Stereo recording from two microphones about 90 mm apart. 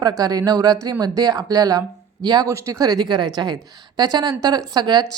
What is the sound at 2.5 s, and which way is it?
A woman's voice, 35° right (ahead or behind).